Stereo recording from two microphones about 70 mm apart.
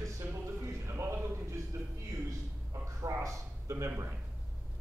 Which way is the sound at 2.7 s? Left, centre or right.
Right.